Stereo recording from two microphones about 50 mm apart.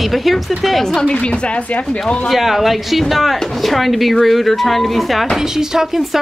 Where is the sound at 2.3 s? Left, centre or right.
Centre.